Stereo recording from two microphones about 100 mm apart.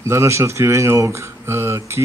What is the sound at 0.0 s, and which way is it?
Speech, 30° right (ahead or behind).